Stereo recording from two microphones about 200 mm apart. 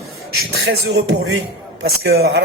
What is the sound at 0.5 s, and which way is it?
Speech, 55° right (ahead or behind).